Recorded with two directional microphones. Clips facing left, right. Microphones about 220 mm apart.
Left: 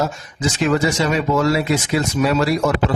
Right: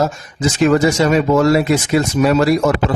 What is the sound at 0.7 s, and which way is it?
Speech, 45° right (ahead or behind).